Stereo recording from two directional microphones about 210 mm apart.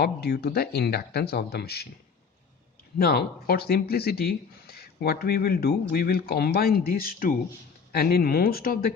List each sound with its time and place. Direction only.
0.0 s speech: 50° left (ahead or behind)
3.0 s speech: 45° left (ahead or behind)